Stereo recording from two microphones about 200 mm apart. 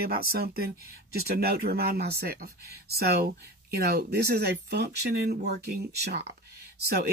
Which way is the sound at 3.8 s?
50° right (ahead or behind).